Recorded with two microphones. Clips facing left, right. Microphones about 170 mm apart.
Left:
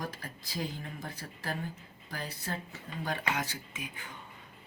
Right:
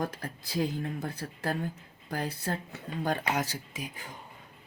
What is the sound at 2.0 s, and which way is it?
Speech, 55° right (ahead or behind).